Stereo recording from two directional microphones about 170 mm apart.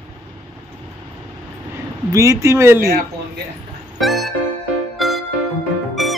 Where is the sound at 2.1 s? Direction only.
15° right (ahead or behind).